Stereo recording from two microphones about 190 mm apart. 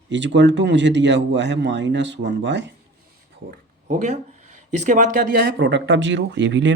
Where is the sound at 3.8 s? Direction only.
40° right (ahead or behind).